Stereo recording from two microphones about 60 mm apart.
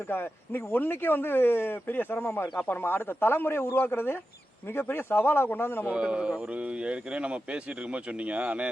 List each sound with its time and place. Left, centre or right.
0.1 s speech: left
5.8 s speech: centre